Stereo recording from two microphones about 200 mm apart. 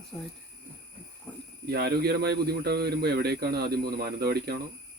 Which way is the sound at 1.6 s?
55° right (ahead or behind).